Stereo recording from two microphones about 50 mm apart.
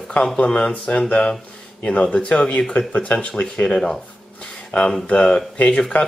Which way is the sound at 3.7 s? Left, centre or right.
Centre.